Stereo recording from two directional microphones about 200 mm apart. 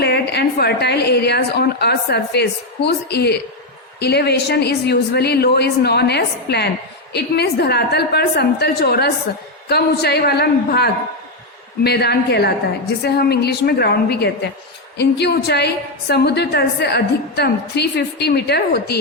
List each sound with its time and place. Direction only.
0.0 s a woman's voice: 55° left (ahead or behind)